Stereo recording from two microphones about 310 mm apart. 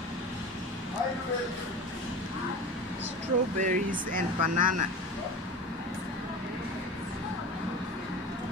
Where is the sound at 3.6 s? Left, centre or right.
Right.